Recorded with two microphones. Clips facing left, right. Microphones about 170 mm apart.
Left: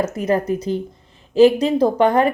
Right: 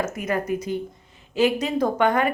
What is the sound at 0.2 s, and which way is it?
Speech, 30° left (ahead or behind).